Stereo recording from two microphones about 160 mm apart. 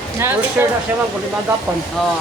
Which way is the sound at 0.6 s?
10° right (ahead or behind).